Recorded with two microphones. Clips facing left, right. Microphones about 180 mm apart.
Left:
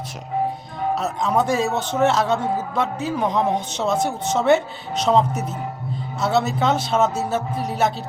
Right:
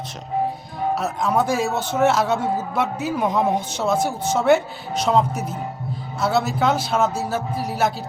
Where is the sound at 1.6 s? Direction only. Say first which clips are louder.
Left 1 dB; 15° left (ahead or behind).